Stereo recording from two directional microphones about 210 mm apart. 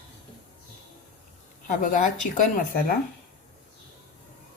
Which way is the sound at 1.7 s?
40° left (ahead or behind).